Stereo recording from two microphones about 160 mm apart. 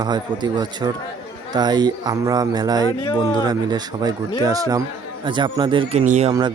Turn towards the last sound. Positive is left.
turn(degrees=-45)  # may be behind; listen again after turning